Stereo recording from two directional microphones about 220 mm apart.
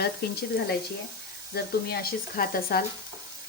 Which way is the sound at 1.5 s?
45° left (ahead or behind).